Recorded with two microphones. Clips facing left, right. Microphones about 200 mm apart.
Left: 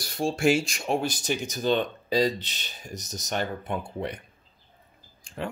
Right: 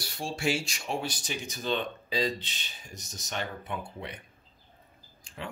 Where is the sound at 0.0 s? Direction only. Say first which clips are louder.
Left 8 dB; 45° left (ahead or behind).